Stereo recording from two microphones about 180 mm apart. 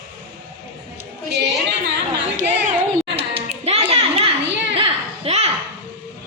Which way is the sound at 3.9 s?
35° right (ahead or behind).